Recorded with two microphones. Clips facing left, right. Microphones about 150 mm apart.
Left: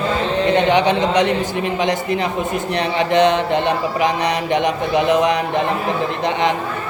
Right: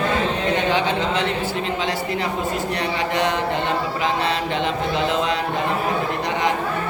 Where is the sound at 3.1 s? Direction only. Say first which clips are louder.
Left 9 dB; 20° left (ahead or behind).